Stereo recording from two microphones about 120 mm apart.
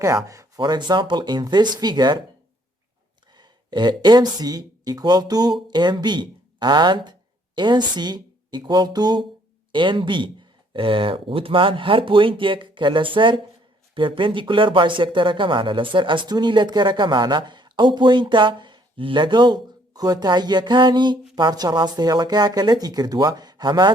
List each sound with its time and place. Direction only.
0.3 s a sound: 25° right (ahead or behind)
0.6 s speech: 40° right (ahead or behind)
3.3 s speech: 40° right (ahead or behind)